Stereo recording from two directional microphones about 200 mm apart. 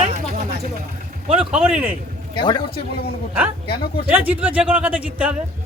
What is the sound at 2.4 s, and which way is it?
Speech, 25° left (ahead or behind).